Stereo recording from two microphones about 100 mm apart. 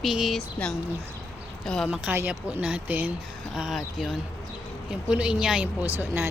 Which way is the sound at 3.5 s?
5° right (ahead or behind).